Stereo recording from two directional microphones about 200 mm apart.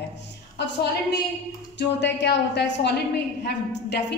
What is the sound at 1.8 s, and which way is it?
A woman's voice, 60° left (ahead or behind).